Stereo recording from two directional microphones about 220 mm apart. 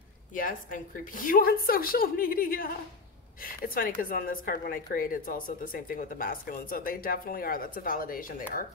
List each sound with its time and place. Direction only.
0.3 s a woman's voice: 40° left (ahead or behind)